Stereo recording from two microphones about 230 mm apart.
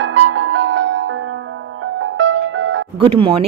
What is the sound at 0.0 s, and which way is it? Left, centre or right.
Music, right.